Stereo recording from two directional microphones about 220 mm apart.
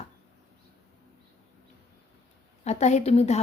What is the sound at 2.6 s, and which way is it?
Speech, 30° left (ahead or behind).